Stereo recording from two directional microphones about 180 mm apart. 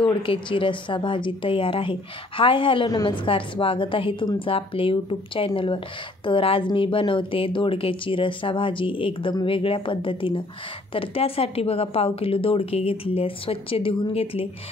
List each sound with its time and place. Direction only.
0.0 s a woman's voice: 30° left (ahead or behind)